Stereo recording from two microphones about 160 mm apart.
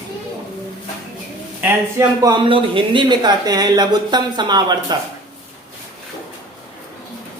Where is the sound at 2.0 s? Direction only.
25° right (ahead or behind).